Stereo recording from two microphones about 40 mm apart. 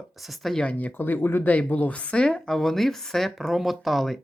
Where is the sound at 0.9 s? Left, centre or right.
Left.